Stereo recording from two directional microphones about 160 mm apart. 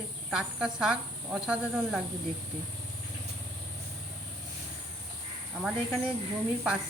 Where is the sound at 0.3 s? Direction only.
5° right (ahead or behind).